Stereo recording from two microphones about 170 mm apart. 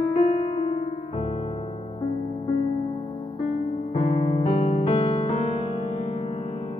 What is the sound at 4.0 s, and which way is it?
Music, 40° left (ahead or behind).